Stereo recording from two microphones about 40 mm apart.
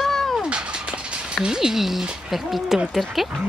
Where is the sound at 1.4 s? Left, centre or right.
Centre.